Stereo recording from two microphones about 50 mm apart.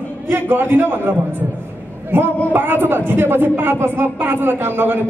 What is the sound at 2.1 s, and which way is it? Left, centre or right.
A man's voice, right.